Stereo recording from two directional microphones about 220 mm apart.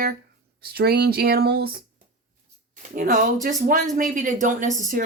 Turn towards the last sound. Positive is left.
turn(degrees=-35)  # may be behind; listen again after turning